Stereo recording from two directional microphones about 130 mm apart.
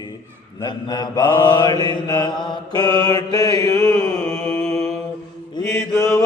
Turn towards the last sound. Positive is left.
turn(degrees=20)  # may be behind; listen again after turning